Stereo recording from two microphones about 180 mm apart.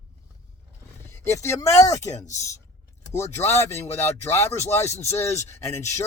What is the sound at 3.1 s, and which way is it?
Speech, 15° left (ahead or behind).